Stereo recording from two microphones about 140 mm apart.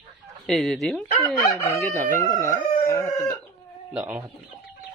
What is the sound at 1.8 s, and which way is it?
Chicken, 15° left (ahead or behind).